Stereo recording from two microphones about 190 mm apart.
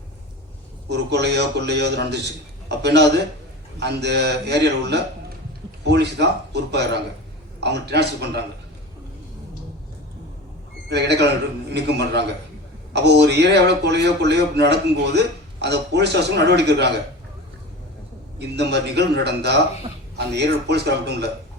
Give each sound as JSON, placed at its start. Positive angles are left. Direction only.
{"t": 0.9, "sound": "a man's voice", "side_deg": -65}
{"t": 10.8, "sound": "a man's voice", "side_deg": -60}
{"t": 18.3, "sound": "a man's voice", "side_deg": -60}